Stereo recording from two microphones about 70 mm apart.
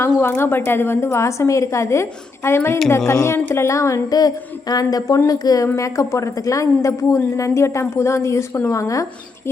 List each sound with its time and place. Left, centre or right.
0.0 s a woman's voice: left
5.7 s a woman's voice: left